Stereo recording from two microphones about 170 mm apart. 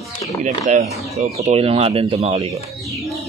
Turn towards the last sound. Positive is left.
turn(degrees=-35)  # may be behind; listen again after turning